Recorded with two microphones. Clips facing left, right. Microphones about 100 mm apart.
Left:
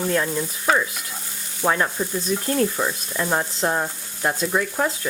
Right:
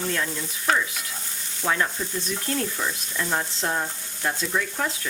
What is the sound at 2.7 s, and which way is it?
Speech, 40° left (ahead or behind).